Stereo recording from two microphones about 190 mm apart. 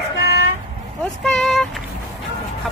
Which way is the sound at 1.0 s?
Centre (ahead or behind).